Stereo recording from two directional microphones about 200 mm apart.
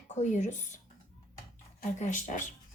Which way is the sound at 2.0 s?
40° left (ahead or behind).